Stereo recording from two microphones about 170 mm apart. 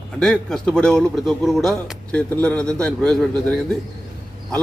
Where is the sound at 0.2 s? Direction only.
5° left (ahead or behind).